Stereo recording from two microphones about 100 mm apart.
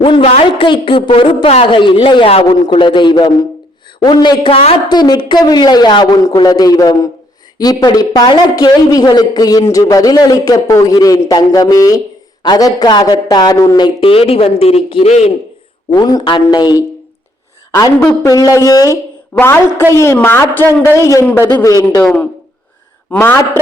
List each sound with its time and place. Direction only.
0.0 s a woman's voice: 70° left (ahead or behind)
0.7 s a woman's voice: 55° left (ahead or behind); by 1.8 s 75° left (ahead or behind)
1.8 s a woman's voice: 55° left (ahead or behind); by 2.6 s 70° left (ahead or behind)
2.6 s a woman's voice: 50° left (ahead or behind); by 4.7 s 70° left (ahead or behind)
4.9 s a man's voice: 45° left (ahead or behind)
14.0 s a man's voice: 70° left (ahead or behind); by 15.3 s 90° left
15.9 s speech: 40° left (ahead or behind)
18.2 s a man's voice: 35° left (ahead or behind)
19.3 s a woman's voice: 20° left (ahead or behind)
23.0 s a man's voice: 15° left (ahead or behind)